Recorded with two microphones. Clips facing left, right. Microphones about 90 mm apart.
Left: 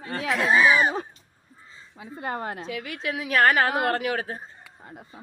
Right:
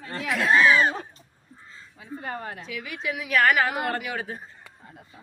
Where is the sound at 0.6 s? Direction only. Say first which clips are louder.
Even; 15° left (ahead or behind).